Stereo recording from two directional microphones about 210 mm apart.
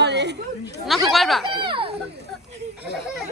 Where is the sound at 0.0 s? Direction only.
55° right (ahead or behind).